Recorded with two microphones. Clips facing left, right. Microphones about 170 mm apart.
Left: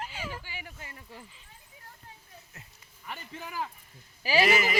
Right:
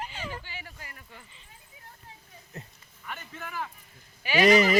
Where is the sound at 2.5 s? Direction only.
35° right (ahead or behind).